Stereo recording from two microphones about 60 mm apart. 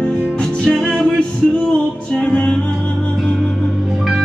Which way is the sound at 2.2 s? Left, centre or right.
Left.